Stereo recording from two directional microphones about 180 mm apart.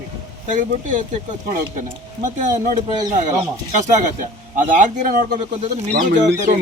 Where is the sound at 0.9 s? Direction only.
45° right (ahead or behind).